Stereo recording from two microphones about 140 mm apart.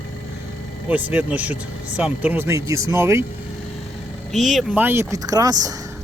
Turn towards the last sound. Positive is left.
turn(degrees=-25)  # may be behind; listen again after turning